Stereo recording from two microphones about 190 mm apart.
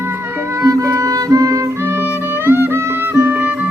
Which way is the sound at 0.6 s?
15° right (ahead or behind).